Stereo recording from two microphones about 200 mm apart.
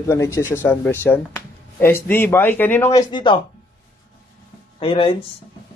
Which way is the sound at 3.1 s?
25° left (ahead or behind).